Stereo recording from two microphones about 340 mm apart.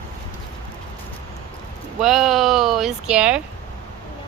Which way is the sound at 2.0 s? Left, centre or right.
Centre.